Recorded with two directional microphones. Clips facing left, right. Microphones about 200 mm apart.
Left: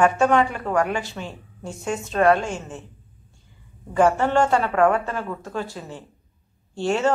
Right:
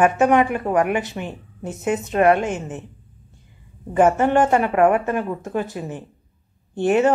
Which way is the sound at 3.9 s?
20° right (ahead or behind).